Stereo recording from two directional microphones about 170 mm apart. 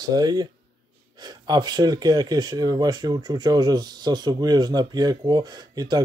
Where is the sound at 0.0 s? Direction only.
25° right (ahead or behind).